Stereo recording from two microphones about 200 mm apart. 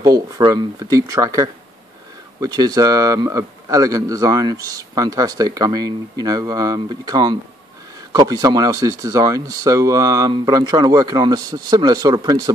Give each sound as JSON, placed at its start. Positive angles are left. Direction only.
{"t": 0.0, "sound": "a man's voice", "side_deg": -15}